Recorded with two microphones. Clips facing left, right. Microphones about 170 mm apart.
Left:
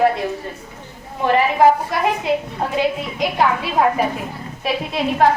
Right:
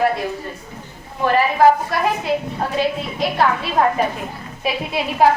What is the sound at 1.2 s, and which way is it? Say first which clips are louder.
A woman's voice: even; 20° left (ahead or behind).